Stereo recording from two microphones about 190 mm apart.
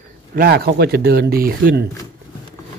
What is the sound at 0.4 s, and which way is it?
Speech, 55° right (ahead or behind).